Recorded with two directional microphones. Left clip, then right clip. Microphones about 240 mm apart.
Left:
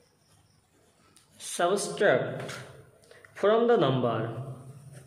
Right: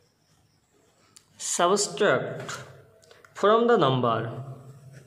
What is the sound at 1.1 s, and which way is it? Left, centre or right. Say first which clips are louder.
A man's voice: right 8 dB; right.